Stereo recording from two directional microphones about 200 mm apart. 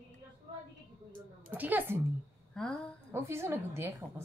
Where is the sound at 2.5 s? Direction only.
Centre (ahead or behind).